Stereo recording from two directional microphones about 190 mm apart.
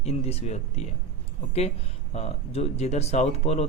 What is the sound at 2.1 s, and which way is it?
Speech, 35° left (ahead or behind).